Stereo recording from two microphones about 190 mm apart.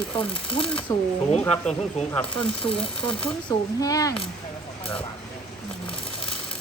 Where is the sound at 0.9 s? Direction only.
15° left (ahead or behind).